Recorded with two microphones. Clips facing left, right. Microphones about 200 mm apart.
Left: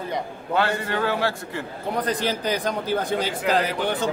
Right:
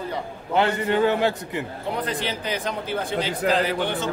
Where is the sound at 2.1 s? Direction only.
40° left (ahead or behind).